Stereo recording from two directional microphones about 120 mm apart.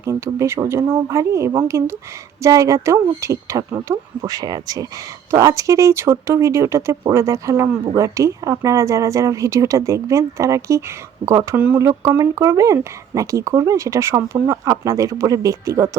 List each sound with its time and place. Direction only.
0.0 s speech: 25° right (ahead or behind)
11.5 s speech: 15° right (ahead or behind)
11.8 s speech: 25° right (ahead or behind)